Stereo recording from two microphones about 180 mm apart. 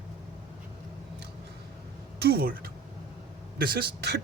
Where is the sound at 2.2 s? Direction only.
60° right (ahead or behind).